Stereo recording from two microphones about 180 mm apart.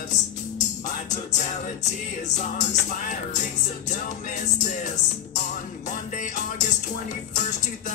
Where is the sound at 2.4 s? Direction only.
45° left (ahead or behind).